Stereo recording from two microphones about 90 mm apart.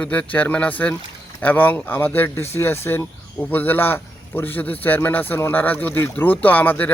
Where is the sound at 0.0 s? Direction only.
15° left (ahead or behind).